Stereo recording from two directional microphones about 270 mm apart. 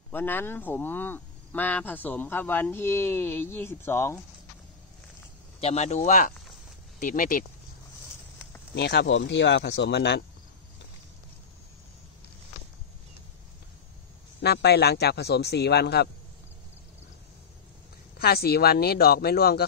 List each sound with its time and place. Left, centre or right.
0.1 s speech: centre
5.6 s speech: left
8.7 s speech: left
14.4 s speech: left
18.2 s speech: left